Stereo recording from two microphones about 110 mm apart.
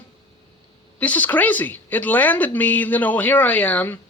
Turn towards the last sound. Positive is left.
turn(degrees=15)  # may be behind; listen again after turning